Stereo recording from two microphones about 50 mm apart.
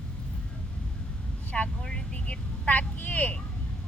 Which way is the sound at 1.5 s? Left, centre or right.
Left.